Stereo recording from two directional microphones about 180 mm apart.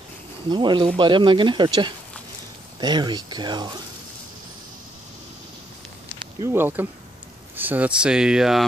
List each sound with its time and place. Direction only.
0.5 s speech: 25° right (ahead or behind)
6.4 s speech: 10° right (ahead or behind)